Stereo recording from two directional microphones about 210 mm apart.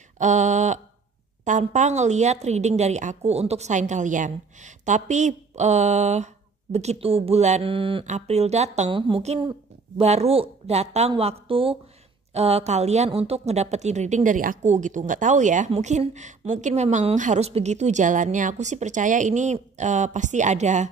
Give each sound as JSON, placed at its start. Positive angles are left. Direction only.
{"t": 0.2, "sound": "a woman's voice", "side_deg": -35}